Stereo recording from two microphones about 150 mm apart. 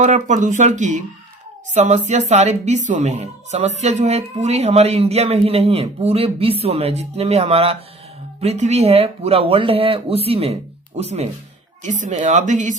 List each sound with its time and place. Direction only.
0.0 s a woman's voice: 55° right (ahead or behind)